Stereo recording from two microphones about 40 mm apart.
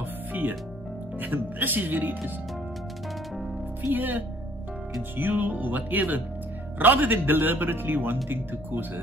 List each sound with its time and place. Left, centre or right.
0.3 s music: right
1.2 s speech: right
3.9 s speech: right